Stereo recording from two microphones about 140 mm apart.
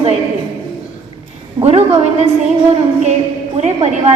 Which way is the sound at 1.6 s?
50° right (ahead or behind).